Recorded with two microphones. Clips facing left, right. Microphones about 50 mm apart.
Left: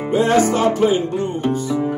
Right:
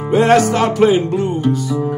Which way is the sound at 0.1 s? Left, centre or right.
Right.